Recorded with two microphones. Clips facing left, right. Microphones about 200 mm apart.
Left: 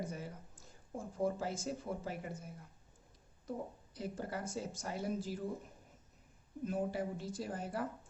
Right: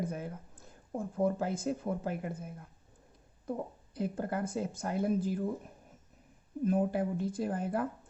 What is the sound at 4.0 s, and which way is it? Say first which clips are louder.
Speech: right 7 dB; 55° right (ahead or behind).